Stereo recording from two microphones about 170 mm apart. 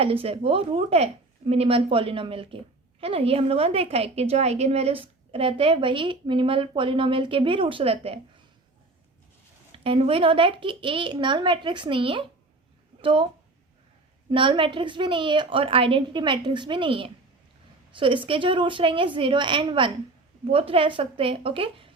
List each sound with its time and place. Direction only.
0.0 s a woman's voice: 35° right (ahead or behind)
9.7 s a woman's voice: 30° right (ahead or behind)
14.3 s a woman's voice: 30° right (ahead or behind)